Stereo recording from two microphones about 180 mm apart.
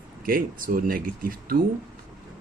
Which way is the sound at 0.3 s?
50° right (ahead or behind).